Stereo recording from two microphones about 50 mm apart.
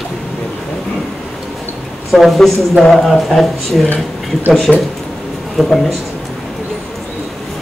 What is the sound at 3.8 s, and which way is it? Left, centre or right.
Speech, left.